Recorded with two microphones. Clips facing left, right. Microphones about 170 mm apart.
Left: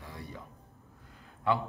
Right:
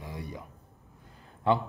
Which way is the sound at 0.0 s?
15° right (ahead or behind).